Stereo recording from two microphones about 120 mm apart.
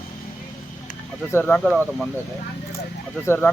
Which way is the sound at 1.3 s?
15° left (ahead or behind).